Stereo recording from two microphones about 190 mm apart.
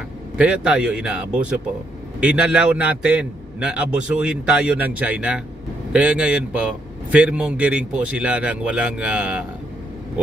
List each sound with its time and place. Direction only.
0.4 s a man's voice: 5° right (ahead or behind)